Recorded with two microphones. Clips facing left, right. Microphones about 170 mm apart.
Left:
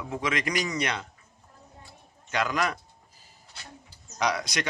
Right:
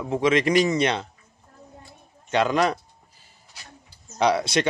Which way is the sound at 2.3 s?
30° right (ahead or behind).